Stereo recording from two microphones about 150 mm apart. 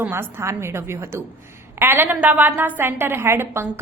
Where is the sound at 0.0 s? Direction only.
15° right (ahead or behind).